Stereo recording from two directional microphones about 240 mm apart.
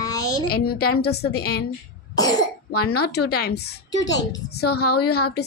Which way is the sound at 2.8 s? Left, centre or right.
Left.